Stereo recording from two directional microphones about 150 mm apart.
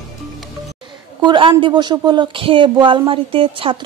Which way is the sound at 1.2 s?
30° right (ahead or behind).